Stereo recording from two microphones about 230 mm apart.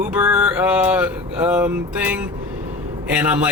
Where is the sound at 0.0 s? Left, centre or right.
Centre.